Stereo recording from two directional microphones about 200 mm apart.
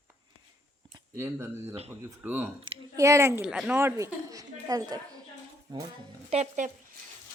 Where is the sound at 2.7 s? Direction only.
25° right (ahead or behind).